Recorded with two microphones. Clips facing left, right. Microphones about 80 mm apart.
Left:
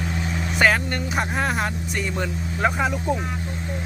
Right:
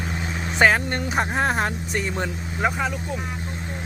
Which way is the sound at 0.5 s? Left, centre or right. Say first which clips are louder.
Right 1 dB; right.